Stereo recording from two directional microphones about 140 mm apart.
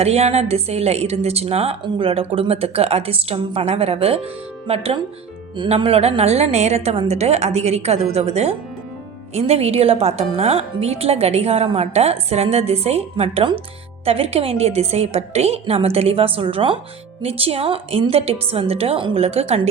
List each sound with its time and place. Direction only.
0.0 s a woman's voice: 50° right (ahead or behind)